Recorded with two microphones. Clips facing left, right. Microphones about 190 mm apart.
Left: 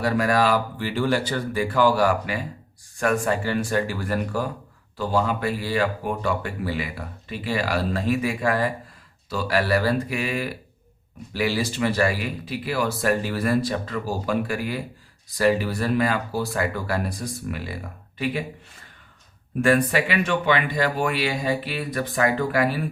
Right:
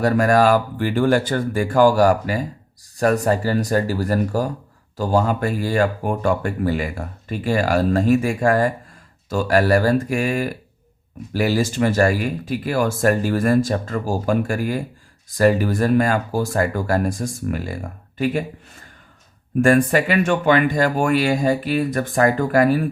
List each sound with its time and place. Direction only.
0.0 s speech: 45° right (ahead or behind)
19.6 s speech: 45° right (ahead or behind)